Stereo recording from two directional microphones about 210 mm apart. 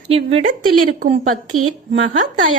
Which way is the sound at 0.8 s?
40° right (ahead or behind).